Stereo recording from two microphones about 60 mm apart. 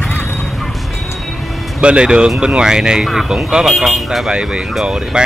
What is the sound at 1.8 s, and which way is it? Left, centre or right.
Speech, centre.